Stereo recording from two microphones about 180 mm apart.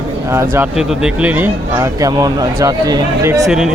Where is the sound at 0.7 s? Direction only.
5° right (ahead or behind).